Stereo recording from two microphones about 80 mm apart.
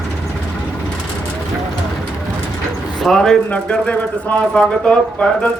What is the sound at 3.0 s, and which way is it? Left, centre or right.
Speech, centre.